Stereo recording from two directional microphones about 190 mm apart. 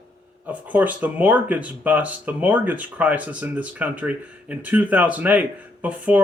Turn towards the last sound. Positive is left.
turn(degrees=-10)  # may be behind; listen again after turning